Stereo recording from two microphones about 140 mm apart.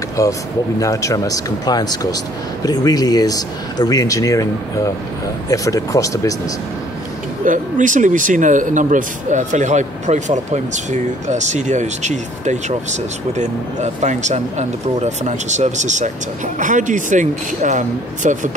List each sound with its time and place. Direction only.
0.2 s speech: 25° left (ahead or behind)
7.4 s speech: 65° right (ahead or behind)